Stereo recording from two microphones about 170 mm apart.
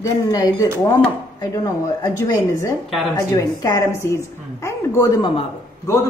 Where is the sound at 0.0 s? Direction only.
20° left (ahead or behind).